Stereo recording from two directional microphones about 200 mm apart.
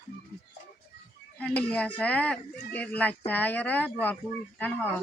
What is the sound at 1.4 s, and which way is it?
Speech, 5° left (ahead or behind).